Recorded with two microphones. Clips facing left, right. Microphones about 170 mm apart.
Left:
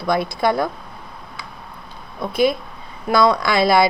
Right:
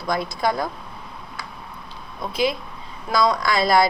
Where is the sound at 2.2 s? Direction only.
55° left (ahead or behind).